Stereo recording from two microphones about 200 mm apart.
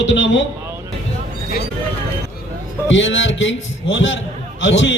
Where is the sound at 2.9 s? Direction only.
70° left (ahead or behind).